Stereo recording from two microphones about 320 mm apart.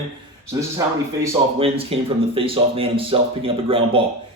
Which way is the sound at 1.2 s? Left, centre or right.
Centre.